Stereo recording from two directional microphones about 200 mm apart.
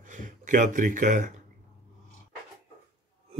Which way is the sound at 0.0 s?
40° right (ahead or behind).